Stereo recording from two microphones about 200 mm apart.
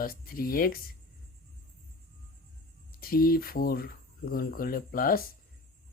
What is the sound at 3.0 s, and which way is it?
Speech, 45° left (ahead or behind).